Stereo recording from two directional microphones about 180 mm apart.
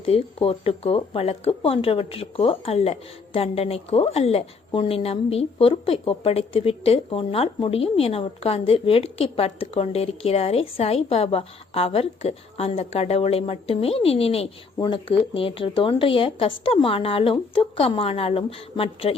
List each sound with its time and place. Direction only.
0.0 s speech: 30° left (ahead or behind)